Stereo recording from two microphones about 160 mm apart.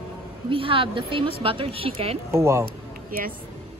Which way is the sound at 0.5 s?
35° right (ahead or behind).